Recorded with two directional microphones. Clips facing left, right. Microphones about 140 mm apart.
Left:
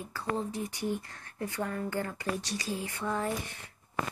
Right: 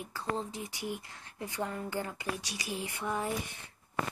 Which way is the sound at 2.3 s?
5° right (ahead or behind).